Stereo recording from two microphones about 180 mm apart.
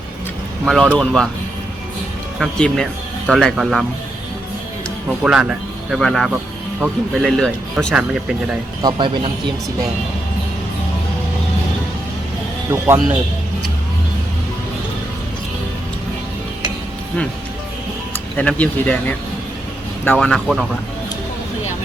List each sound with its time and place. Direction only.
0.6 s speech: centre (ahead or behind)
2.4 s speech: 5° left (ahead or behind)
5.2 s speech: 5° right (ahead or behind)
8.8 s speech: 25° right (ahead or behind)
12.7 s speech: 10° right (ahead or behind)
18.1 s speech: 10° left (ahead or behind)